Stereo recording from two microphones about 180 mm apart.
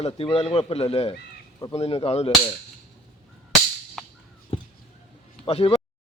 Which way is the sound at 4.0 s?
Centre (ahead or behind).